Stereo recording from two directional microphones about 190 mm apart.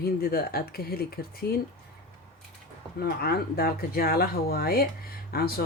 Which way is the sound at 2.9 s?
55° left (ahead or behind).